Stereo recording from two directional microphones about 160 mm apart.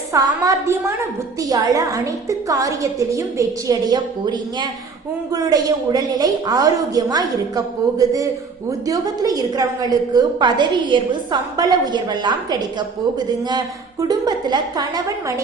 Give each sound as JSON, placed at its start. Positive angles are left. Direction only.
{"t": 0.1, "sound": "a woman's voice", "side_deg": -20}
{"t": 14.1, "sound": "a woman's voice", "side_deg": -25}